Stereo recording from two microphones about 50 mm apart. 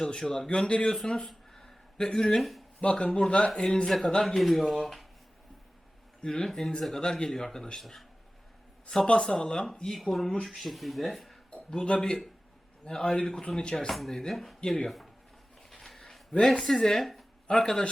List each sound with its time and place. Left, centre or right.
0.1 s speech: centre
1.5 s a sound: centre
2.4 s speech: centre
2.8 s speech: left; by 5.0 s centre
6.2 s speech: centre
9.2 s speech: centre
9.9 s speech: centre
13.7 s speech: centre
14.6 s speech: centre
14.8 s speech: centre
15.7 s zipper: centre
17.5 s speech: centre